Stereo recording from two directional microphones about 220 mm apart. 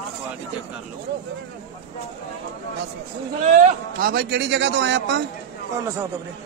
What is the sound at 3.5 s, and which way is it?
A man's voice, 45° right (ahead or behind).